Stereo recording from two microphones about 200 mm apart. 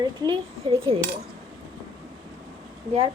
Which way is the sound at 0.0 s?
20° right (ahead or behind).